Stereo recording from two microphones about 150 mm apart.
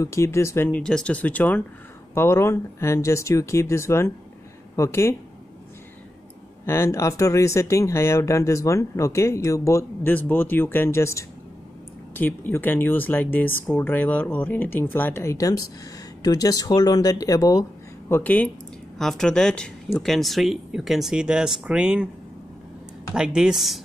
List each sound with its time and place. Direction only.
0.0 s speech: 20° left (ahead or behind)
0.7 s speech: 5° left (ahead or behind)
6.6 s speech: 15° left (ahead or behind); by 22.1 s 5° right (ahead or behind)
23.1 s speech: 5° right (ahead or behind)